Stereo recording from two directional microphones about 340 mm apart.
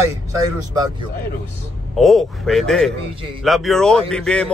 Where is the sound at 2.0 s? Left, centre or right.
Centre.